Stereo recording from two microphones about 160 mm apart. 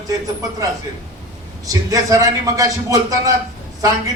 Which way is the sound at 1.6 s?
20° right (ahead or behind).